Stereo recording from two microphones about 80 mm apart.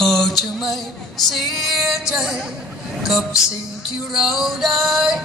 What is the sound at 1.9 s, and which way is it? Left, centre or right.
Music, centre.